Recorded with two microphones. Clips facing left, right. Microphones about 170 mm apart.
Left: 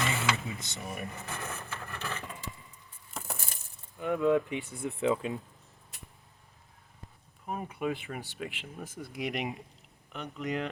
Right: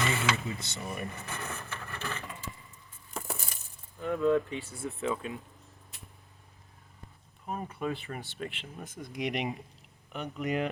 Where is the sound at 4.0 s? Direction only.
15° left (ahead or behind).